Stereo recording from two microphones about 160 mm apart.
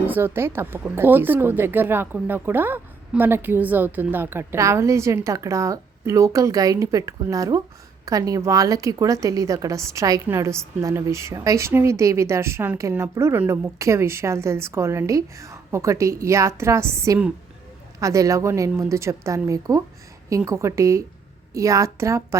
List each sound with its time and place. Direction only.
0.1 s a woman's voice: 15° right (ahead or behind)